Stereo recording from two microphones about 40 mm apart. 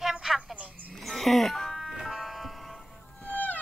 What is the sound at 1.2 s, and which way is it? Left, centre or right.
Speech, centre.